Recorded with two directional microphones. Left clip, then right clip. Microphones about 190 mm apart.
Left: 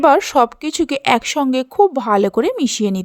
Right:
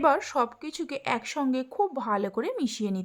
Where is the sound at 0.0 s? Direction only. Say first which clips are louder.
Left 12 dB; 40° left (ahead or behind).